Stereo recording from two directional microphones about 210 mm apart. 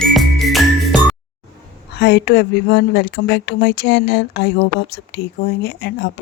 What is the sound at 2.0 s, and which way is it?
Speech, 50° left (ahead or behind).